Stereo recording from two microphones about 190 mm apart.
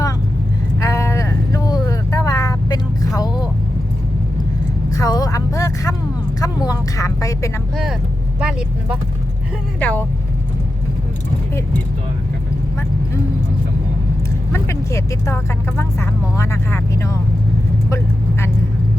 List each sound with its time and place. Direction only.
0.8 s vehicle: 15° left (ahead or behind)
4.9 s vehicle: 20° left (ahead or behind)
8.4 s speech: 5° right (ahead or behind)
9.8 s speech: 10° left (ahead or behind)
14.5 s vehicle: 15° left (ahead or behind)